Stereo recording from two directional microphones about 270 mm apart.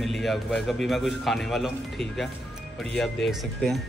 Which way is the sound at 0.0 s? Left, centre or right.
Centre.